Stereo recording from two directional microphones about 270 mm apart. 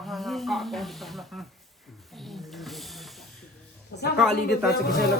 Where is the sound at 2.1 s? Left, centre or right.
Centre.